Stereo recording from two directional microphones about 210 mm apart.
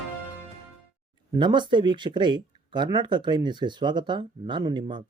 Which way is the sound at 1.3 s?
20° right (ahead or behind).